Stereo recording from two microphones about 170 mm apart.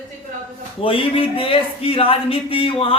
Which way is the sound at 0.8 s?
30° left (ahead or behind).